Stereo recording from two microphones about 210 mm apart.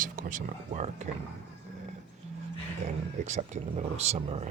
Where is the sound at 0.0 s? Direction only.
40° right (ahead or behind).